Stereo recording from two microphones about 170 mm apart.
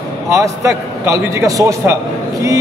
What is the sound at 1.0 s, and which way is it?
Speech, 20° right (ahead or behind).